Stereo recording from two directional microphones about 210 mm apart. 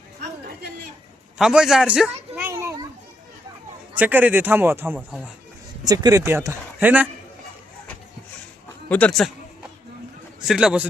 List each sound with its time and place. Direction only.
0.4 s chatter: 50° right (ahead or behind)
1.4 s a sound: 5° right (ahead or behind)
3.9 s a man's voice: 10° right (ahead or behind)
5.8 s a man's voice: 15° right (ahead or behind)
8.9 s a man's voice: 5° left (ahead or behind)
10.4 s a man's voice: 5° right (ahead or behind)